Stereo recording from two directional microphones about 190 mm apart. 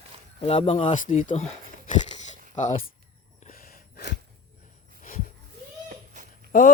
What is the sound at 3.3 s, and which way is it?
Sneeze, 45° left (ahead or behind).